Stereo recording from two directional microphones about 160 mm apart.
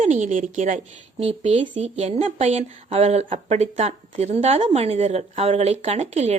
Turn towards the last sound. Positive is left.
turn(degrees=-45)  # may be behind; listen again after turning